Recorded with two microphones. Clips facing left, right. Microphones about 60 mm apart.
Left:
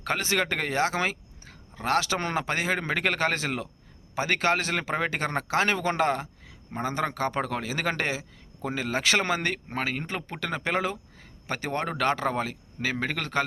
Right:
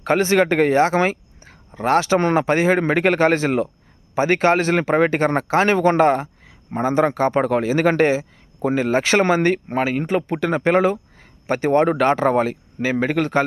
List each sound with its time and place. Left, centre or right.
0.0 s speech: right
9.7 s speech: centre
10.6 s speech: right
12.8 s a man's voice: centre